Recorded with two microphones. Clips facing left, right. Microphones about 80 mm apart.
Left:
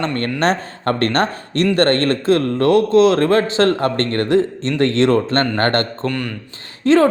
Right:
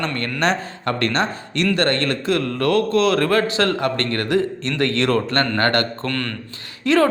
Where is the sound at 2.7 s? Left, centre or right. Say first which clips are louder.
Left 5 dB; left.